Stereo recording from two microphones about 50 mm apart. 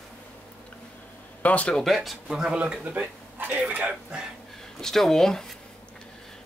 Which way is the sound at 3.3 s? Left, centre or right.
Right.